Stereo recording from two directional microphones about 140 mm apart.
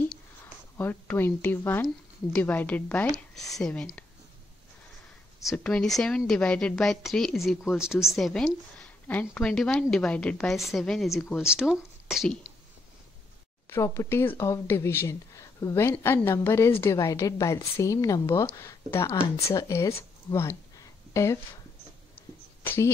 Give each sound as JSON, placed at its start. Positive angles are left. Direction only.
{"t": 0.7, "sound": "a woman's voice", "side_deg": 15}
{"t": 5.4, "sound": "a woman's voice", "side_deg": 0}
{"t": 8.7, "sound": "a sound", "side_deg": 10}
{"t": 9.3, "sound": "a woman's voice", "side_deg": 5}
{"t": 13.7, "sound": "a woman's voice", "side_deg": 20}
{"t": 20.0, "sound": "a sound", "side_deg": 20}
{"t": 22.6, "sound": "speech", "side_deg": 15}